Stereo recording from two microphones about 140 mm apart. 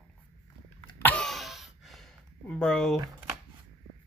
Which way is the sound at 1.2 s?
Centre (ahead or behind).